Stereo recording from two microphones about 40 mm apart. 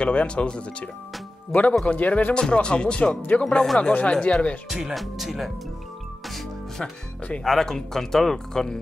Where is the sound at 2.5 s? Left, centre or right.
Left.